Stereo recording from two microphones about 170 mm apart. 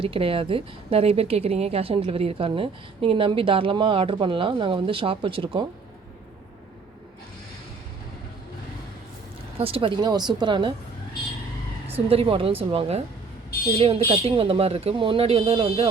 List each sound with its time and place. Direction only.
0.0 s a woman's voice: 30° right (ahead or behind)
9.6 s speech: 35° right (ahead or behind)
12.0 s a woman's voice: 35° right (ahead or behind)